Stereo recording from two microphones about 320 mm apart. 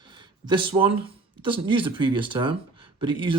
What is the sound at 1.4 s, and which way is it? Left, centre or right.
Speech, centre.